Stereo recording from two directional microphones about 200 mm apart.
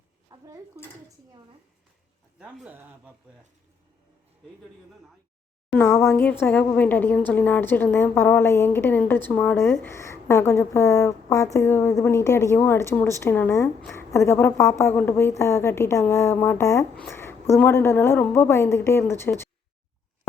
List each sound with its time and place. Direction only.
0.3 s a sound: 15° right (ahead or behind)
2.4 s speech: 5° right (ahead or behind)
5.7 s a woman's voice: 15° left (ahead or behind)